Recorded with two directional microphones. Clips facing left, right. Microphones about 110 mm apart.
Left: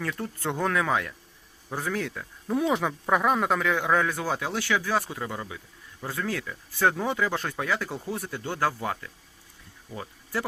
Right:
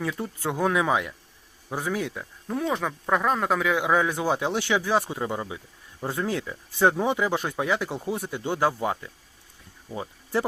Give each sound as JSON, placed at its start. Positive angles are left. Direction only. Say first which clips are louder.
{"t": 0.0, "sound": "speech", "louder": "right 2 dB", "side_deg": -10}
{"t": 2.5, "sound": "speech", "louder": "left 2 dB", "side_deg": 5}